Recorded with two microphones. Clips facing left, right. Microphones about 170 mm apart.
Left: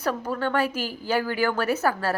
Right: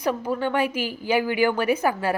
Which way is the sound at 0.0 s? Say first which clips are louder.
Right 2 dB; 10° right (ahead or behind).